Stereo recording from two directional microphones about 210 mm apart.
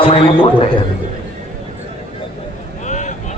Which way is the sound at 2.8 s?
35° left (ahead or behind).